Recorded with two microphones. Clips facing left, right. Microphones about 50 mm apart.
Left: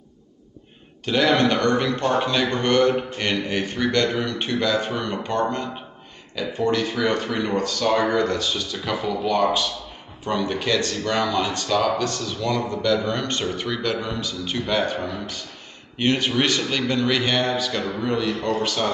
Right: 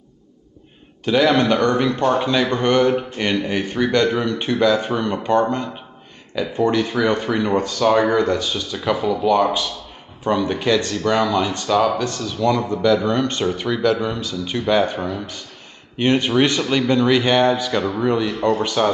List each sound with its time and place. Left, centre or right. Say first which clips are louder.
1.0 s speech: right 3 dB; centre
2.1 s speech: right 3 dB; centre
2.5 s speech: right 2 dB; centre
12.4 s speech: right 7 dB; centre